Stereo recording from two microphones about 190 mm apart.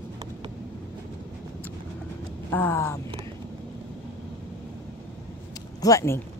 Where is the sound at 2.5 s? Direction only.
10° left (ahead or behind).